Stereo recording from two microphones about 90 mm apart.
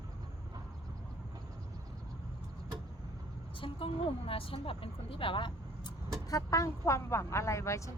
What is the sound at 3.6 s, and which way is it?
Speech, 85° left.